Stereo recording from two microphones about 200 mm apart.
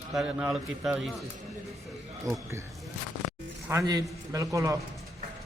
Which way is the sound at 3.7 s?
15° right (ahead or behind).